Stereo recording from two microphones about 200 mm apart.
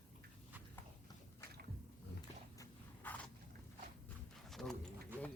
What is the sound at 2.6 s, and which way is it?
Biting, 10° left (ahead or behind).